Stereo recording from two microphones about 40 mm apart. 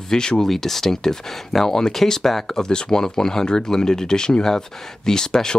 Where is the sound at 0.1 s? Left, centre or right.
Centre.